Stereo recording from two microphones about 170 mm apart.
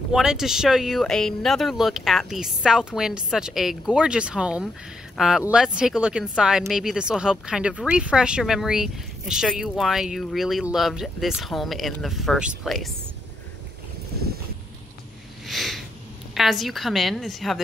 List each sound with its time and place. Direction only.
0.1 s speech: 5° right (ahead or behind)
14.1 s boat: 70° right (ahead or behind)
15.4 s a sound: centre (ahead or behind)
16.3 s speech: centre (ahead or behind)